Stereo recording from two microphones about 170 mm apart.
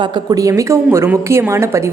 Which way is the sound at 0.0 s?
25° right (ahead or behind).